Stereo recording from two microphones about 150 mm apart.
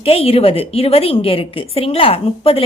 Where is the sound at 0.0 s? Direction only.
40° left (ahead or behind).